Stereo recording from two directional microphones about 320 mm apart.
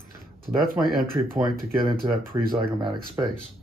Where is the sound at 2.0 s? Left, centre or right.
Right.